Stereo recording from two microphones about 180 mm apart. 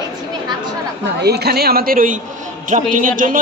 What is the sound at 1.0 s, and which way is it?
A woman's voice, 65° right (ahead or behind).